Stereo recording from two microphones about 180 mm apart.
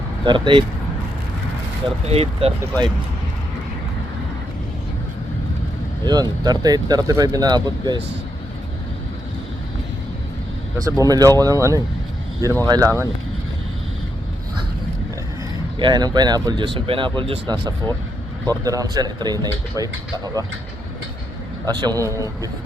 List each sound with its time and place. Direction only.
0.3 s speech: 25° right (ahead or behind)
2.0 s speech: 35° right (ahead or behind)
6.1 s speech: 20° right (ahead or behind)
10.8 s speech: 20° right (ahead or behind)
15.8 s speech: 20° right (ahead or behind)
21.7 s speech: 20° right (ahead or behind)